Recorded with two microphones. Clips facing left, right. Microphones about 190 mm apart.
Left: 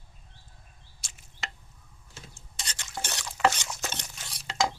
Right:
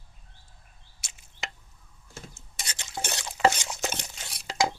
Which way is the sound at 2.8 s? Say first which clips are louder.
Right 3 dB; 20° right (ahead or behind).